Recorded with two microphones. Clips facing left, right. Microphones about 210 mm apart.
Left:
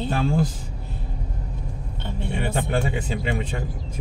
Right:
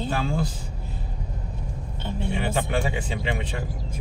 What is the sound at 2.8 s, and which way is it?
Speech, 40° left (ahead or behind).